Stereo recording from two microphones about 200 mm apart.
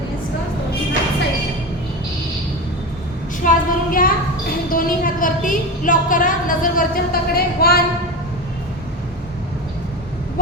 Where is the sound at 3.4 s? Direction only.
45° left (ahead or behind).